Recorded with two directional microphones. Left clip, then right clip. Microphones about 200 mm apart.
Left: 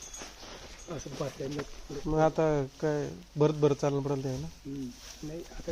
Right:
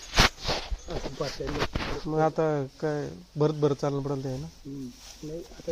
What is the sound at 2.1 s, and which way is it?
Speech, 10° right (ahead or behind).